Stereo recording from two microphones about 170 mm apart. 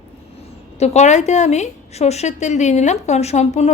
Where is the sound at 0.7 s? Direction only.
40° left (ahead or behind).